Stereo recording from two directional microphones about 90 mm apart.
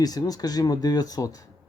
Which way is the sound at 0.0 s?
45° left (ahead or behind).